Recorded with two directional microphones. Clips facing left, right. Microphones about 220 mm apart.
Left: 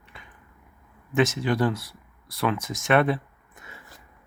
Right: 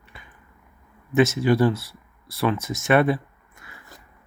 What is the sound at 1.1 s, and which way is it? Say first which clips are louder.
Speech: right 4 dB; 5° right (ahead or behind).